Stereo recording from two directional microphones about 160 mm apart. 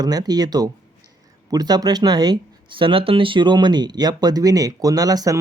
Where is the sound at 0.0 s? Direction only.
25° right (ahead or behind).